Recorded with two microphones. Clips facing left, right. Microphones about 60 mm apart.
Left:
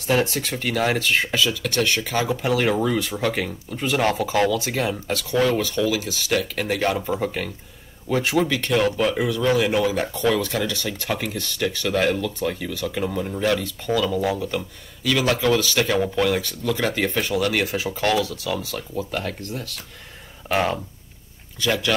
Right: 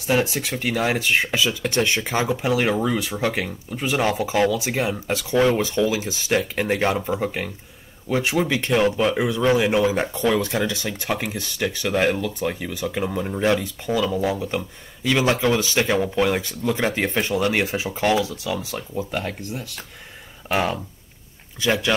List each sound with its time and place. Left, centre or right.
0.0 s speech: centre
20.4 s speech: centre
21.5 s speech: right